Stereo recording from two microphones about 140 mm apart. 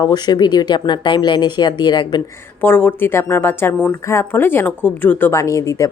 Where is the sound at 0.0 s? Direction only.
30° left (ahead or behind).